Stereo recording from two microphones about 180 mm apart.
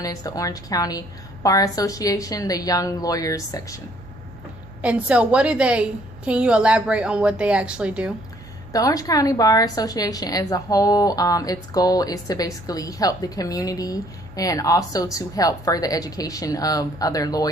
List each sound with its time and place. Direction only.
0.0 s a woman's voice: 20° left (ahead or behind)
4.8 s a woman's voice: 5° right (ahead or behind)
8.7 s a woman's voice: 20° left (ahead or behind)